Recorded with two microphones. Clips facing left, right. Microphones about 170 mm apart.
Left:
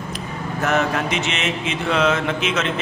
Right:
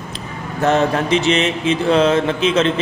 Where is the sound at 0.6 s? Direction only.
30° right (ahead or behind).